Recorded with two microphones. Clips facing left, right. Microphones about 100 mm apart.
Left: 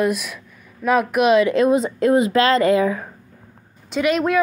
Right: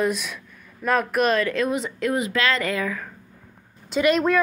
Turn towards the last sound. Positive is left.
turn(degrees=0)  # may be behind; listen again after turning